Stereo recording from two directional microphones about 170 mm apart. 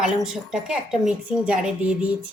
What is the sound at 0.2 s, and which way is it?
A woman's voice, 5° right (ahead or behind).